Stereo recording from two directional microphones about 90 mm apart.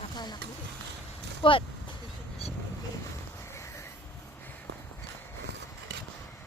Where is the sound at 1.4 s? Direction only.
70° left (ahead or behind).